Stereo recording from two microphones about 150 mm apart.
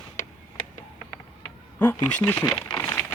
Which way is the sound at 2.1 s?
10° left (ahead or behind).